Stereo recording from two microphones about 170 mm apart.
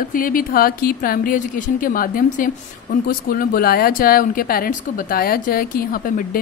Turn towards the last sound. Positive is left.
turn(degrees=55)  # may be behind; listen again after turning